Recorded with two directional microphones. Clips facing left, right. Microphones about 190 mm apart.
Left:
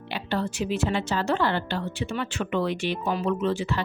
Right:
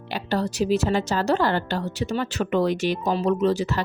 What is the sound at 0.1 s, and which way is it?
A woman's voice, 40° right (ahead or behind).